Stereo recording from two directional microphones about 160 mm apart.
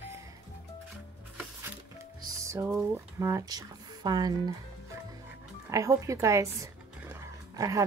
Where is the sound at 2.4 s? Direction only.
20° right (ahead or behind).